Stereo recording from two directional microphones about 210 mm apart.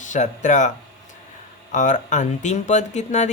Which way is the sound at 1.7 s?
35° left (ahead or behind).